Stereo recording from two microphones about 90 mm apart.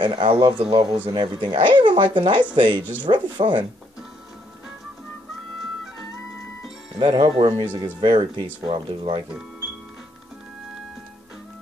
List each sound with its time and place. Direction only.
0.0 s speech: 80° right; by 3.6 s 60° right (ahead or behind)
7.0 s speech: 80° right